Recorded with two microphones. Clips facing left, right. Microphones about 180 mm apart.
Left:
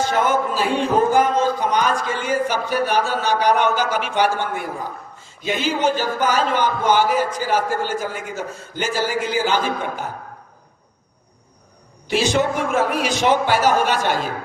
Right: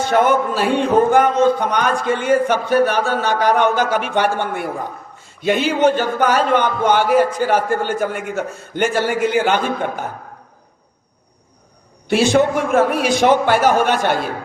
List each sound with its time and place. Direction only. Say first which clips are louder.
0.1 s a man's voice: right 4 dB; 60° right (ahead or behind)
12.0 s a man's voice: right 5 dB; 55° right (ahead or behind)